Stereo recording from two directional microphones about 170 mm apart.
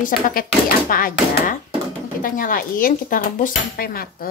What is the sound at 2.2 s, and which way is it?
A woman's voice, 55° left (ahead or behind).